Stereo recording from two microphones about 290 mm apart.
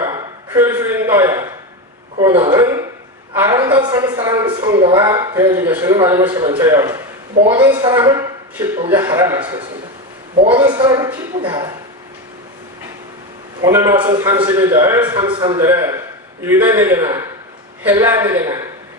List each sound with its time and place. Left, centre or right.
0.0 s a man's voice: centre
13.7 s a woman's voice: centre